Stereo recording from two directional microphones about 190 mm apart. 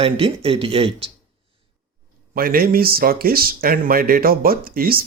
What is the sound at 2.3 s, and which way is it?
Speech, 50° right (ahead or behind).